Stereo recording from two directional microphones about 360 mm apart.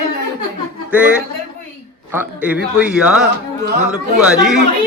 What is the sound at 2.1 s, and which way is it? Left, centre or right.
Speech, centre.